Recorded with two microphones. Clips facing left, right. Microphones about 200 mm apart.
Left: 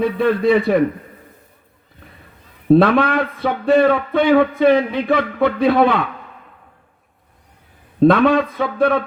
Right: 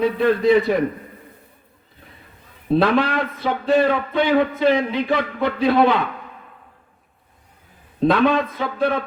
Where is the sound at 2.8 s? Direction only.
55° left (ahead or behind).